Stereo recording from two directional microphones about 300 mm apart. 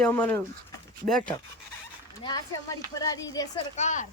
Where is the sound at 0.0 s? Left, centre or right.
Centre.